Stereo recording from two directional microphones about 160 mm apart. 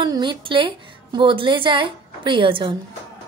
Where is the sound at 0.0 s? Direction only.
30° right (ahead or behind).